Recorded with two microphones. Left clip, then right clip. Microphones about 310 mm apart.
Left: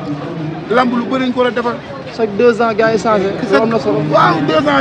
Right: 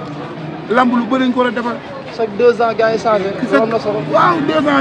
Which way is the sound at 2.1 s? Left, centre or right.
Left.